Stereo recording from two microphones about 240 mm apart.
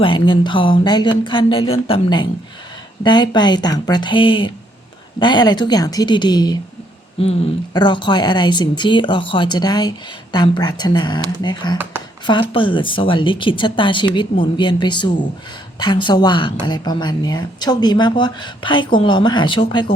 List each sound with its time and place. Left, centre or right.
0.0 s a woman's voice: left